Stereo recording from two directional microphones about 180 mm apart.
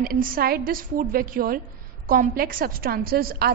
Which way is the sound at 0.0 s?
50° right (ahead or behind).